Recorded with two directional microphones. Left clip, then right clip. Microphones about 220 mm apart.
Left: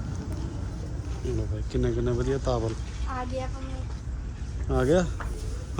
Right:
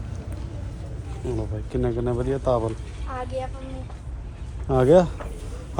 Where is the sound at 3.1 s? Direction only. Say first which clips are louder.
Right 3 dB; 20° left (ahead or behind).